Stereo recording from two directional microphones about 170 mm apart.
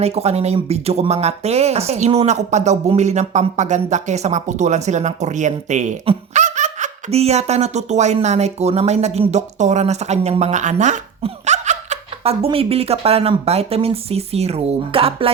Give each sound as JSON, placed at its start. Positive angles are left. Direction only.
{"t": 0.0, "sound": "speech", "side_deg": -35}